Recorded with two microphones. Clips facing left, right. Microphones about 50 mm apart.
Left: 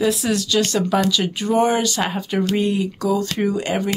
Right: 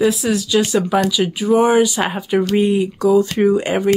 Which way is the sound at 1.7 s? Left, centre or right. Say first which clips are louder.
Right 5 dB; centre.